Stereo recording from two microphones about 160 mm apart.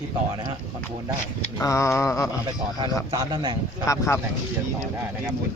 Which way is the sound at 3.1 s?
25° right (ahead or behind).